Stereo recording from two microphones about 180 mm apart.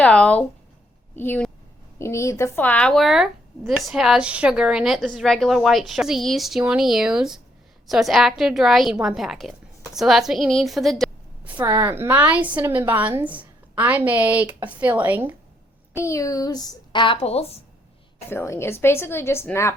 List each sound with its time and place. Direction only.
0.0 s a woman's voice: 5° left (ahead or behind)
11.5 s a woman's voice: 15° right (ahead or behind)
16.0 s a woman's voice: 15° left (ahead or behind); by 17.6 s 35° left (ahead or behind)
18.3 s a woman's voice: 15° left (ahead or behind)